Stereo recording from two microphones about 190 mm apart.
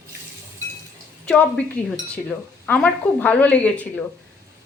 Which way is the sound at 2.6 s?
10° left (ahead or behind).